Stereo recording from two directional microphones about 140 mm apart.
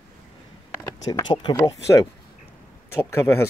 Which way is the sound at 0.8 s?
25° left (ahead or behind).